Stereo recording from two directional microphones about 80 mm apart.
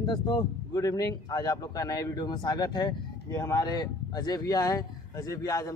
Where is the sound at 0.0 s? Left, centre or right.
Left.